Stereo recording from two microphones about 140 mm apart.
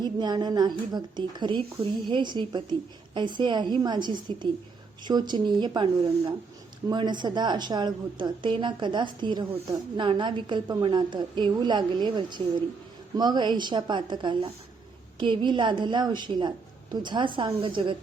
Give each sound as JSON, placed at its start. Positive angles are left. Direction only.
{"t": 0.0, "sound": "a woman's voice", "side_deg": -30}